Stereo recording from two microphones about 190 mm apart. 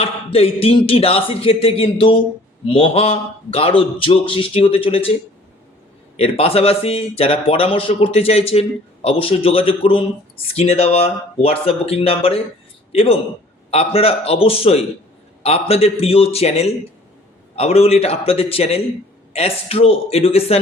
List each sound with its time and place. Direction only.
0.0 s a sound: 30° left (ahead or behind)
0.9 s speech: 30° left (ahead or behind)
6.1 s a man's voice: 30° left (ahead or behind)